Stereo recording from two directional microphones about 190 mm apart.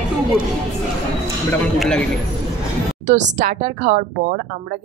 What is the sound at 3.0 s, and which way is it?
A woman's voice, 40° right (ahead or behind).